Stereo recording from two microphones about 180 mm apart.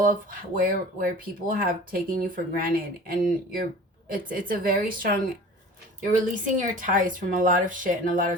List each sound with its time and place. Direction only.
0.3 s speech: 50° right (ahead or behind)